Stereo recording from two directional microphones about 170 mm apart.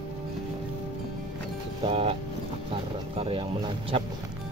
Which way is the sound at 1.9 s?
35° right (ahead or behind).